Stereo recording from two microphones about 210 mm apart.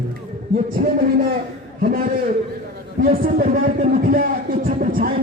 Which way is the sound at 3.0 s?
40° right (ahead or behind).